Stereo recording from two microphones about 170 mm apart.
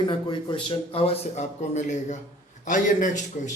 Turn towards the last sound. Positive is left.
turn(degrees=50)  # may be behind; listen again after turning